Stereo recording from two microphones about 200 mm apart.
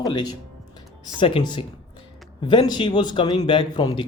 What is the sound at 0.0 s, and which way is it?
Speech, 20° left (ahead or behind).